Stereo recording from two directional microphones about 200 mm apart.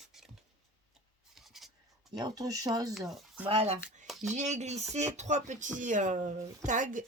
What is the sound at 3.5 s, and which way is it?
Speech, 25° right (ahead or behind).